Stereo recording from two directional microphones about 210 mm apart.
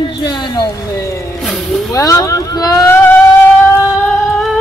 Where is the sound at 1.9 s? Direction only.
15° left (ahead or behind).